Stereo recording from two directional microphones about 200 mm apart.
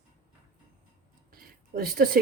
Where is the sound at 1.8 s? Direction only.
45° right (ahead or behind).